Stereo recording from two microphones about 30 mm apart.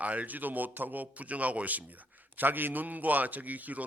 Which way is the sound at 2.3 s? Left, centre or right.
Right.